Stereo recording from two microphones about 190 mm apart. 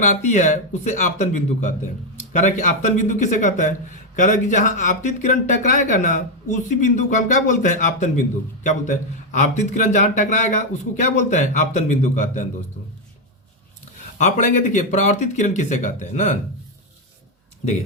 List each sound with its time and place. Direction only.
0.0 s speech: 40° left (ahead or behind)
14.2 s speech: 40° left (ahead or behind)